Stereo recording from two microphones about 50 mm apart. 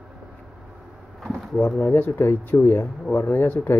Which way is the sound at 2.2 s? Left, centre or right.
Left.